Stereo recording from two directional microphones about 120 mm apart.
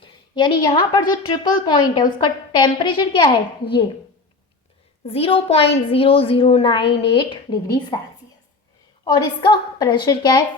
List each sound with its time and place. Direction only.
0.0 s a woman's voice: 40° left (ahead or behind)
5.0 s a woman's voice: 50° left (ahead or behind)
9.0 s a woman's voice: 35° left (ahead or behind)